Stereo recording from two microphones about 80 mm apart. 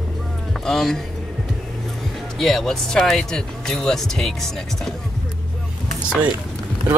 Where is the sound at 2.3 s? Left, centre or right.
Centre.